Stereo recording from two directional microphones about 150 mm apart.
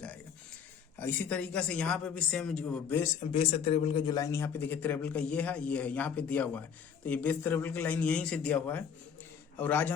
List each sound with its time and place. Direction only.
0.9 s speech: 15° left (ahead or behind)
3.2 s a man's voice: 45° left (ahead or behind); by 9.9 s 10° left (ahead or behind)